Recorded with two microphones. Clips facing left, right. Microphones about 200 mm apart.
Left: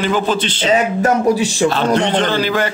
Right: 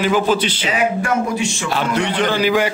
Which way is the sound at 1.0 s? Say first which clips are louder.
Left 5 dB; 35° left (ahead or behind).